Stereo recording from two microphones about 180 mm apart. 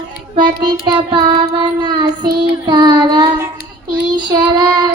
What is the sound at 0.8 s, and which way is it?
Child singing, 25° right (ahead or behind).